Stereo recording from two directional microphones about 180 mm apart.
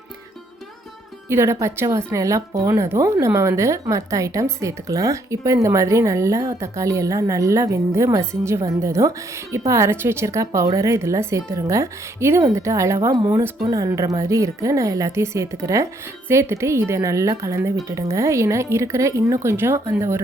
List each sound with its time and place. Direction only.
1.3 s speech: 15° right (ahead or behind)